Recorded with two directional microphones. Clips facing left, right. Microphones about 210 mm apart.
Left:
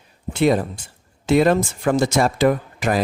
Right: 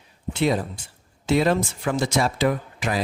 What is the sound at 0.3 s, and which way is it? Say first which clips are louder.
Speech: left 5 dB; 50° left (ahead or behind).